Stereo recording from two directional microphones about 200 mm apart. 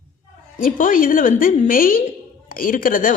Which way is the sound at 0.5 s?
45° left (ahead or behind).